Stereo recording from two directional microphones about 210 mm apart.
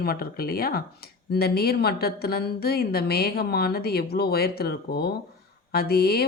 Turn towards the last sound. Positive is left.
turn(degrees=50)  # may be behind; listen again after turning